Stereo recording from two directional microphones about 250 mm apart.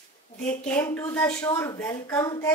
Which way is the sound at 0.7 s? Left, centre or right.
Centre.